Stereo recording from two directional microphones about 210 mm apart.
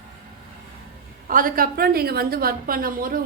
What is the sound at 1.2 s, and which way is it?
A woman's voice, 40° right (ahead or behind).